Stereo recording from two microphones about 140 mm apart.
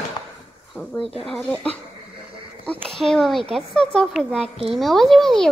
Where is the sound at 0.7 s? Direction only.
Centre (ahead or behind).